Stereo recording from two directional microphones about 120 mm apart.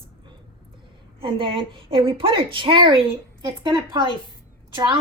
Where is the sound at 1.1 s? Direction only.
45° right (ahead or behind).